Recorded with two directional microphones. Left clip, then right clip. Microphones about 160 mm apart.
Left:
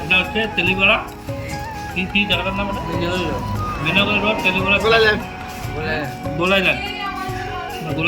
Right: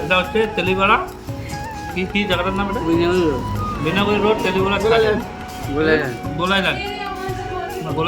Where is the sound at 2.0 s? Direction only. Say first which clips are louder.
Left 1 dB; 20° right (ahead or behind).